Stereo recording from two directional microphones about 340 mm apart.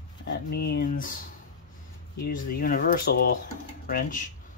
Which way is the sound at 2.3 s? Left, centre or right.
Left.